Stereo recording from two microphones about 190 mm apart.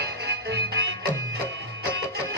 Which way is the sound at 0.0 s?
60° right (ahead or behind).